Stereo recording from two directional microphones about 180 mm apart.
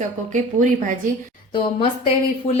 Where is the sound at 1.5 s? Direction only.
30° left (ahead or behind).